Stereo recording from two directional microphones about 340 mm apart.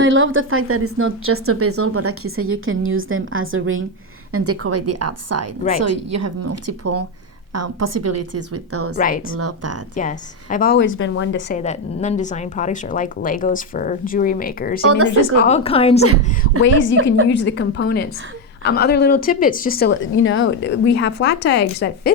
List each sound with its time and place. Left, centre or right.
0.0 s a woman's voice: right
9.0 s a woman's voice: left
9.4 s a woman's voice: right
9.9 s a woman's voice: left
14.8 s a woman's voice: right
15.4 s a woman's voice: centre
16.4 s a woman's voice: left